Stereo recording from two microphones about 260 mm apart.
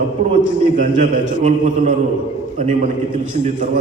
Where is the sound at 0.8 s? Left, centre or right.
Right.